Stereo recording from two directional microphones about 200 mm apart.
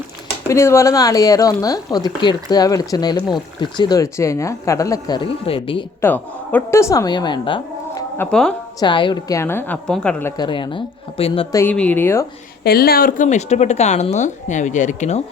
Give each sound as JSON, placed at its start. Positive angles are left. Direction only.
{"t": 0.4, "sound": "speech", "side_deg": 15}
{"t": 6.0, "sound": "a woman's voice", "side_deg": 10}
{"t": 8.2, "sound": "a woman's voice", "side_deg": 5}
{"t": 8.8, "sound": "speech", "side_deg": 25}
{"t": 10.3, "sound": "speech", "side_deg": 20}
{"t": 11.5, "sound": "speech", "side_deg": 10}
{"t": 12.6, "sound": "speech", "side_deg": 50}